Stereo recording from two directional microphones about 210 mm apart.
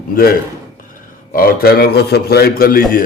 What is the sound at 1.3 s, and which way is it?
Mantra, 45° left (ahead or behind).